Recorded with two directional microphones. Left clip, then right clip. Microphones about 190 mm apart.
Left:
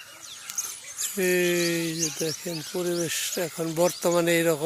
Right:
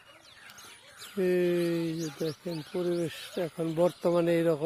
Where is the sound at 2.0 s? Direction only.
25° left (ahead or behind).